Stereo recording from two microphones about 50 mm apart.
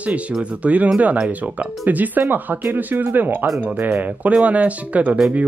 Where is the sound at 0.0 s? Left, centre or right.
Right.